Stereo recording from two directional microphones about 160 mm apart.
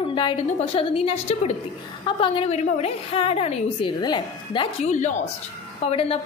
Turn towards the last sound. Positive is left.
turn(degrees=40)  # may be behind; listen again after turning